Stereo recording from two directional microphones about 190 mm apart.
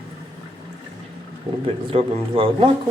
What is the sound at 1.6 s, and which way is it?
Speech, 30° right (ahead or behind).